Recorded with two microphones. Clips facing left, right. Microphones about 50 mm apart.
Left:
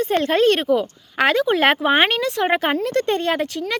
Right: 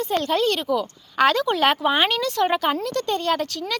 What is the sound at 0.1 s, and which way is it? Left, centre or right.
Speech, left.